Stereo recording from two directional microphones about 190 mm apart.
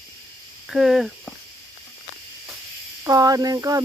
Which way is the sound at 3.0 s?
20° right (ahead or behind).